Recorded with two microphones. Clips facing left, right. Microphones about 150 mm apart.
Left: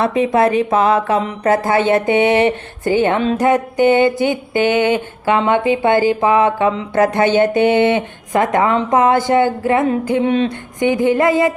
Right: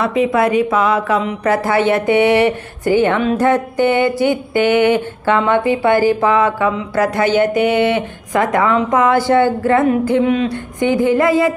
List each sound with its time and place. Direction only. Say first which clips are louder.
0.2 s a woman's voice: right 1 dB; 25° left (ahead or behind)